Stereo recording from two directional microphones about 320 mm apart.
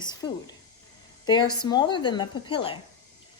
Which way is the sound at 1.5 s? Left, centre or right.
Centre.